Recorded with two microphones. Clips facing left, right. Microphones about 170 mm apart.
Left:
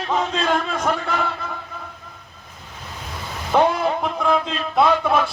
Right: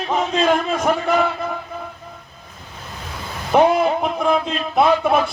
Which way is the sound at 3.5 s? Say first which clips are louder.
Right 3 dB; 15° right (ahead or behind).